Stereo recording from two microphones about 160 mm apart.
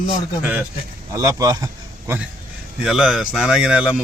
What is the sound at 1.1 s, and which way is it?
Speech, 20° right (ahead or behind).